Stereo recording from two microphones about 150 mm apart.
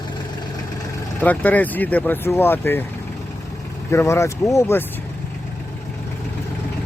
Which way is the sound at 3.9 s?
20° left (ahead or behind).